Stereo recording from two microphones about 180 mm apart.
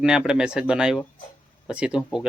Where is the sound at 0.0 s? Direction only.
5° right (ahead or behind).